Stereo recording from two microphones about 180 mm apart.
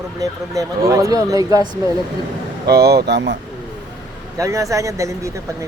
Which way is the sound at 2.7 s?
60° right (ahead or behind).